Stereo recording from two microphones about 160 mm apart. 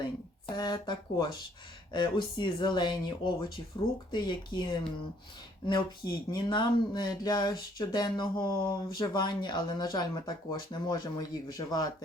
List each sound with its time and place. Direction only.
0.4 s speech: 25° left (ahead or behind)